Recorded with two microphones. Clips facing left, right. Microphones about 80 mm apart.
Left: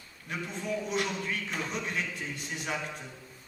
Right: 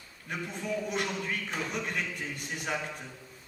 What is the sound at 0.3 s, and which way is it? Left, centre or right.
A man's voice, right.